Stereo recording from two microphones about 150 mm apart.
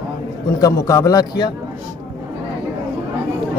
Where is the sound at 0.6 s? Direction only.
20° left (ahead or behind).